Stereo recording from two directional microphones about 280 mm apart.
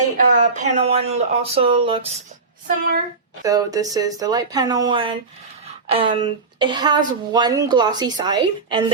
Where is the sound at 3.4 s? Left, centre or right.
Centre.